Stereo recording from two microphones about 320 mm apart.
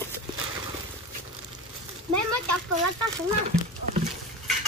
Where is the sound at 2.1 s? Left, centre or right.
Right.